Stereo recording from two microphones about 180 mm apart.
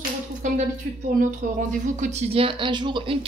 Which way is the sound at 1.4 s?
45° right (ahead or behind).